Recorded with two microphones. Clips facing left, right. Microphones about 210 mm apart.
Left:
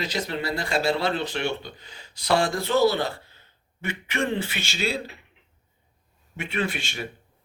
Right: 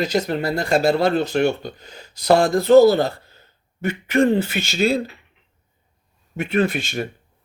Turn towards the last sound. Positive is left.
turn(degrees=-45)  # may be behind; listen again after turning